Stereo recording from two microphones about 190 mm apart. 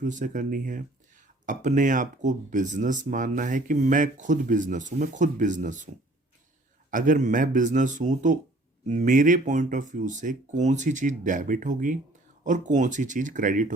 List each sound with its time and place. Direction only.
0.0 s speech: 40° right (ahead or behind)
6.9 s speech: 45° right (ahead or behind)